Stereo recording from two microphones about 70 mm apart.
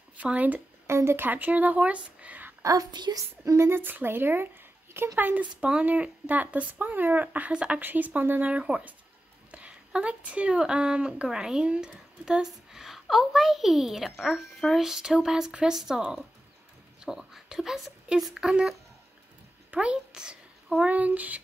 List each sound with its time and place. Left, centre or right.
0.2 s speech: right
0.8 s speech: right
2.6 s a woman's voice: right
2.9 s a woman's voice: right
3.2 s speech: right
3.6 s speech: right; by 7.8 s centre
7.8 s a child's voice: right; by 20.8 s centre
20.8 s speech: right